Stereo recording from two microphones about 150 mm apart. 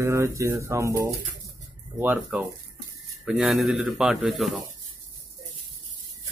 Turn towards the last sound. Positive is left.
turn(degrees=0)  # may be behind; listen again after turning